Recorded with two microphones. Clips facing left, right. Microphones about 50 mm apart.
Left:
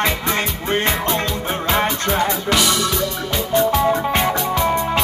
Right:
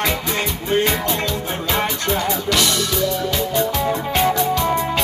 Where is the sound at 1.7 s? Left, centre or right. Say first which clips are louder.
Left 2 dB; centre.